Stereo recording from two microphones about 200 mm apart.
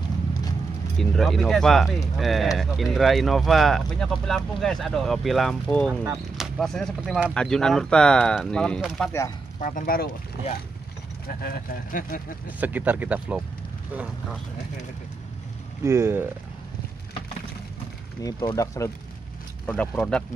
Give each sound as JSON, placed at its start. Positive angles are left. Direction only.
{"t": 0.9, "sound": "speech", "side_deg": 0}
{"t": 9.6, "sound": "speech", "side_deg": 40}
{"t": 11.2, "sound": "speech", "side_deg": 45}
{"t": 12.5, "sound": "speech", "side_deg": -10}
{"t": 15.8, "sound": "speech", "side_deg": -10}
{"t": 18.2, "sound": "speech", "side_deg": 20}
{"t": 19.6, "sound": "speech", "side_deg": 5}